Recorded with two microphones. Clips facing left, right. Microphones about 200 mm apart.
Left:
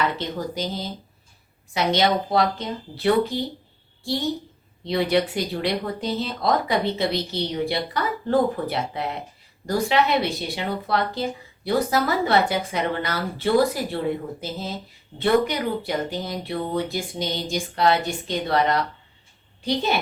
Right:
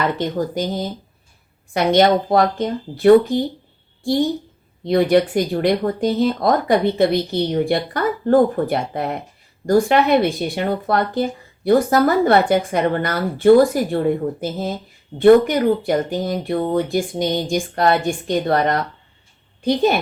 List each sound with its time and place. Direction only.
0.2 s speech: 50° right (ahead or behind)
4.9 s speech: 50° right (ahead or behind)